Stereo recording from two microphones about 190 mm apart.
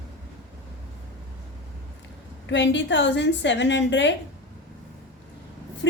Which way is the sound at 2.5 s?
70° left (ahead or behind).